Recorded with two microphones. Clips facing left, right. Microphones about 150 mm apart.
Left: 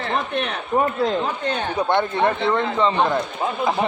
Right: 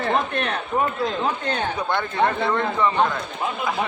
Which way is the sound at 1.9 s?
25° left (ahead or behind).